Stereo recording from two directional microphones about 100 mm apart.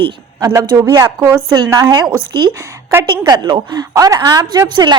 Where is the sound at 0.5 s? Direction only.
30° right (ahead or behind).